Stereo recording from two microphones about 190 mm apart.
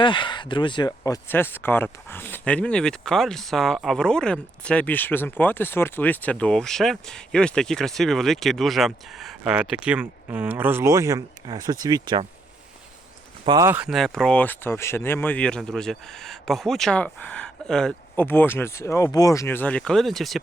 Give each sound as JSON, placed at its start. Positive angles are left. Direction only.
{"t": 0.0, "sound": "speech", "side_deg": 25}
{"t": 13.4, "sound": "speech", "side_deg": -25}
{"t": 13.7, "sound": "speech", "side_deg": -5}